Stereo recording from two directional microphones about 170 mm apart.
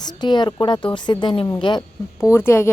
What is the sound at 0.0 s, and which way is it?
A woman's voice, 25° left (ahead or behind).